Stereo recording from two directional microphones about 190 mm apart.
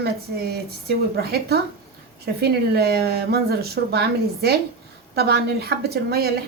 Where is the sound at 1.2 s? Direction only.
55° right (ahead or behind).